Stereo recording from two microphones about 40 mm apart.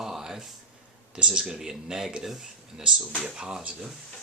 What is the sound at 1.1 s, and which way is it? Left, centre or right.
Speech, right.